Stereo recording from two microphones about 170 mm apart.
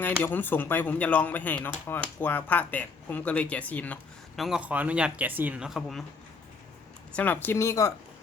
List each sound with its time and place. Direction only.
0.0 s speech: 10° left (ahead or behind)
4.4 s speech: centre (ahead or behind)
7.2 s speech: 10° left (ahead or behind)